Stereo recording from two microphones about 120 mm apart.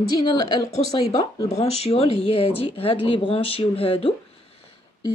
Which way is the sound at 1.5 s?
60° left (ahead or behind).